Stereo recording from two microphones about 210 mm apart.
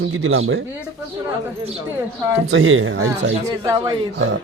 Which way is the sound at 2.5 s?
70° right (ahead or behind).